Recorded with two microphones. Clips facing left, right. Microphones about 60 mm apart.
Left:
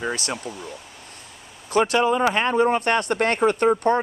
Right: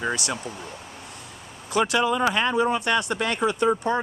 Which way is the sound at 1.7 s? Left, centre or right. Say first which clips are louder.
Left 3 dB; left.